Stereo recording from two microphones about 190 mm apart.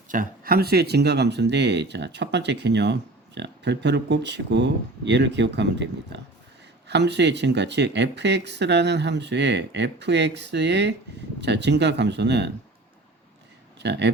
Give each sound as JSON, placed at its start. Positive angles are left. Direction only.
{"t": 0.1, "sound": "speech", "side_deg": -50}
{"t": 13.7, "sound": "speech", "side_deg": -65}